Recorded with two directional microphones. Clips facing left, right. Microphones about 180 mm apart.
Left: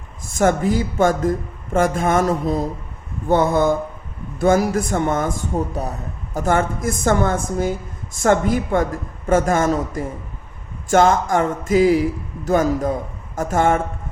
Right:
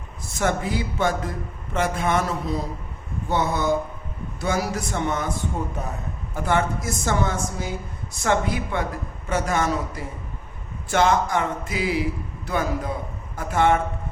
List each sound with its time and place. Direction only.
0.3 s a man's voice: 45° left (ahead or behind)